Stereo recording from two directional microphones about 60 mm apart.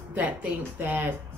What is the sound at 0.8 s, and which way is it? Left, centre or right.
Speech, right.